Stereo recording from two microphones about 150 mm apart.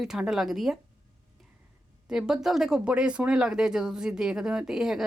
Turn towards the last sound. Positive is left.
turn(degrees=-5)  # may be behind; listen again after turning